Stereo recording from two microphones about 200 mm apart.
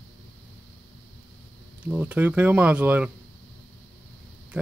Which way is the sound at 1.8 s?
10° right (ahead or behind).